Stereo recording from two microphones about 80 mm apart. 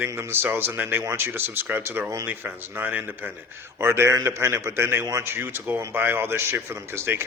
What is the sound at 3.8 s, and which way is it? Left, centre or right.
A man's voice, right.